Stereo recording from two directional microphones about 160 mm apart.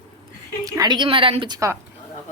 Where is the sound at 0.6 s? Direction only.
25° right (ahead or behind).